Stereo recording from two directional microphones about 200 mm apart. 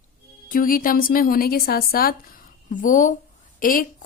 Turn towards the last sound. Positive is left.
turn(degrees=45)  # may be behind; listen again after turning